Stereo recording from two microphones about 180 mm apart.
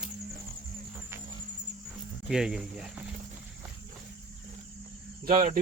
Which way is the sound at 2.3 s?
5° right (ahead or behind).